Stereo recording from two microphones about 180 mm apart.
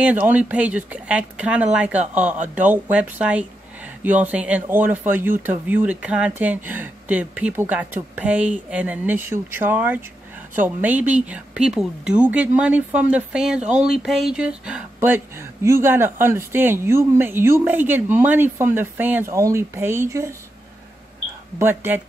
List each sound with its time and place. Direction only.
0.0 s speech: 10° right (ahead or behind)
21.5 s speech: 10° right (ahead or behind)